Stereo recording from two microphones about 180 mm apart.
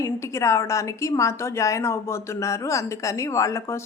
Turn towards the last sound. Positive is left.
turn(degrees=15)  # may be behind; listen again after turning